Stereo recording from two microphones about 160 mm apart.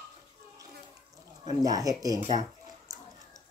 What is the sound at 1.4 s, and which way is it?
Speech, 20° right (ahead or behind).